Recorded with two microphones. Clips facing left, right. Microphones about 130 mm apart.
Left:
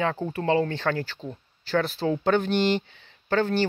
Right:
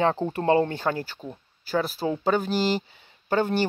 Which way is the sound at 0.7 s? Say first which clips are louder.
Even; 15° right (ahead or behind).